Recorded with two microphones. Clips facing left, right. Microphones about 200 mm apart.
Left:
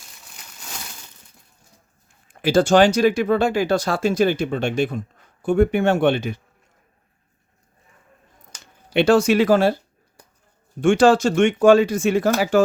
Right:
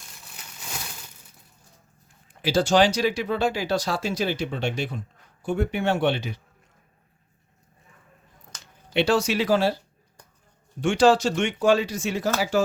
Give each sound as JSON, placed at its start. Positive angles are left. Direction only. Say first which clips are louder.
{"t": 2.2, "sound": "speech", "louder": "left 6 dB", "side_deg": 50}
{"t": 8.9, "sound": "speech", "louder": "left 6 dB", "side_deg": 50}
{"t": 10.8, "sound": "speech", "louder": "left 4 dB", "side_deg": 50}